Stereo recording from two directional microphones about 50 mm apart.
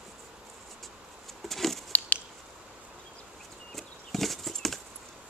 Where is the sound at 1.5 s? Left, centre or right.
Centre.